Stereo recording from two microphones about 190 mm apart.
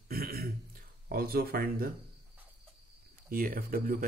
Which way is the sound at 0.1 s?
50° right (ahead or behind).